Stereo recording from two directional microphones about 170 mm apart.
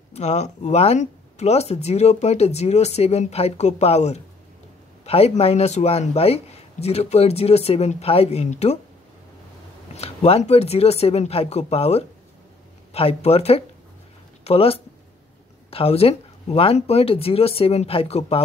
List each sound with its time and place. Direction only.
0.1 s speech: 40° left (ahead or behind)
9.9 s speech: 35° left (ahead or behind)